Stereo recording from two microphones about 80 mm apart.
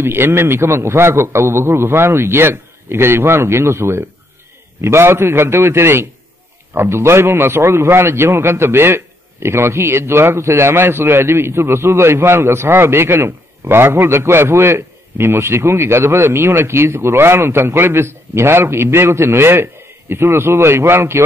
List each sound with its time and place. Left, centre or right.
0.0 s a man's voice: right